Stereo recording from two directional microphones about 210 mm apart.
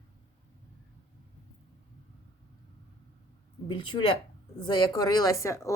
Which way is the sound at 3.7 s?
20° left (ahead or behind).